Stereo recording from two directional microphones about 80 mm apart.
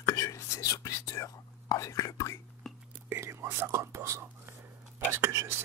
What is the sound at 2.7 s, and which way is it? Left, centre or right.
Whispering, centre.